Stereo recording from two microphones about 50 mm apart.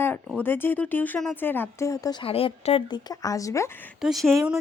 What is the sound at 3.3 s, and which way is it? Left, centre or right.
Speech, left.